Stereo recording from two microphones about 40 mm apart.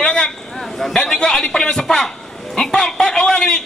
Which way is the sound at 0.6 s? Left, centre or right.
Centre.